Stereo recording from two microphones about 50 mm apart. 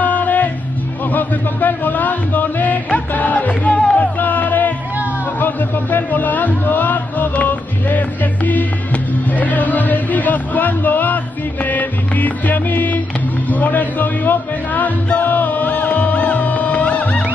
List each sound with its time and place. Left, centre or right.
0.0 s music: left